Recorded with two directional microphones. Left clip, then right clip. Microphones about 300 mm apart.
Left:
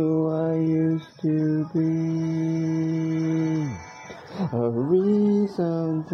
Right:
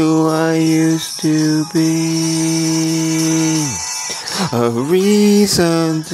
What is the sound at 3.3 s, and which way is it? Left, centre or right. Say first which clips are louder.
Music: right 9 dB; centre.